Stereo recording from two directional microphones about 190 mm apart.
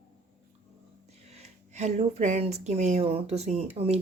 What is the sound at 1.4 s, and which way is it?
Speech, 35° right (ahead or behind).